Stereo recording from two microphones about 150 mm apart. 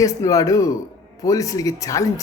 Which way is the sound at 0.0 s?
20° left (ahead or behind).